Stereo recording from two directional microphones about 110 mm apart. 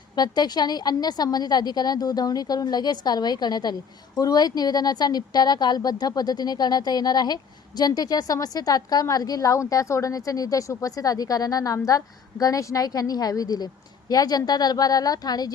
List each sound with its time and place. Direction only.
0.2 s a woman's voice: 40° left (ahead or behind)